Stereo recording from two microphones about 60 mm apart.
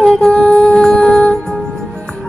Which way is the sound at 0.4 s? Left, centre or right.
Centre.